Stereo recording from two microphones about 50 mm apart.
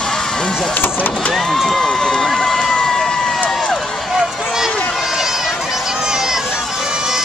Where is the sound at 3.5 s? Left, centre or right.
Centre.